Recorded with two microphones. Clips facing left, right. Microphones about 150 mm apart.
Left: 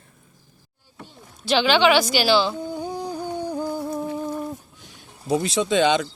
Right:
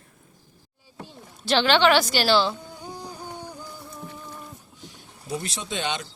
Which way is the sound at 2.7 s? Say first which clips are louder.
Left 9 dB; 65° left (ahead or behind).